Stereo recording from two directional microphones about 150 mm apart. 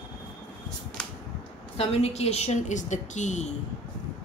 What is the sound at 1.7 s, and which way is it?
A woman's voice, 40° left (ahead or behind).